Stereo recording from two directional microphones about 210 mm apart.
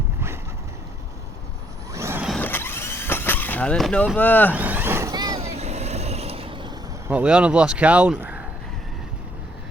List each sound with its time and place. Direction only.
1.9 s vehicle: 15° right (ahead or behind)
2.3 s vehicle: 10° left (ahead or behind)
4.5 s vehicle: 10° right (ahead or behind); by 6.7 s 25° right (ahead or behind)
7.1 s speech: 5° right (ahead or behind)